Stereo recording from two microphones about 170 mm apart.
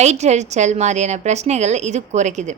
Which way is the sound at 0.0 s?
40° right (ahead or behind).